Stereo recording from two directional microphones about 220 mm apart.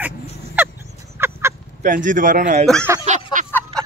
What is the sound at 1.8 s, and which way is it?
Speech, 35° right (ahead or behind).